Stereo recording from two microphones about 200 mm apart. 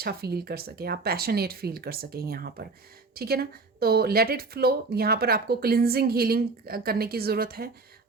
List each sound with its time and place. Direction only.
0.0 s speech: 50° right (ahead or behind)